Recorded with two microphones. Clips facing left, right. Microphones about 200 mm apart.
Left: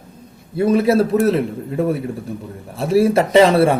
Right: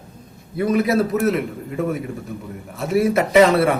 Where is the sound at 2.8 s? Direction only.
30° left (ahead or behind).